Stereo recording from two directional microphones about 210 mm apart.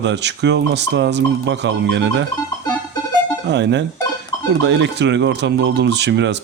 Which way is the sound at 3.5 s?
55° right (ahead or behind).